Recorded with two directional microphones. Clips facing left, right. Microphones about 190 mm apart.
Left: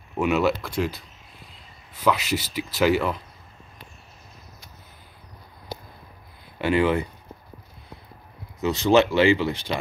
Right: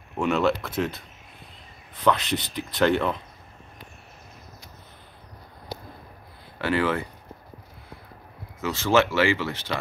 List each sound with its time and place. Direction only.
0.2 s speech: 5° left (ahead or behind)
2.0 s speech: 5° left (ahead or behind)
6.6 s speech: 15° left (ahead or behind)
8.5 s speech: 20° left (ahead or behind)